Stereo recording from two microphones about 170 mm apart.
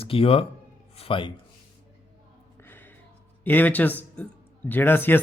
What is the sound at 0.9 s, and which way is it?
Music, 30° left (ahead or behind).